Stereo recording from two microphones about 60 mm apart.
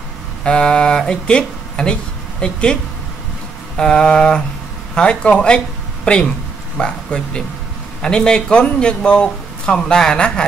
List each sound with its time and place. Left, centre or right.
0.4 s speech: centre